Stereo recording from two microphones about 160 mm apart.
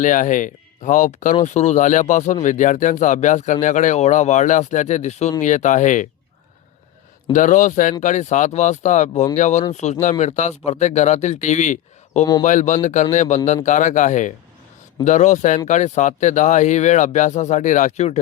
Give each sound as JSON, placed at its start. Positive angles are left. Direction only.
{"t": 0.0, "sound": "speech", "side_deg": 55}
{"t": 7.3, "sound": "speech", "side_deg": 55}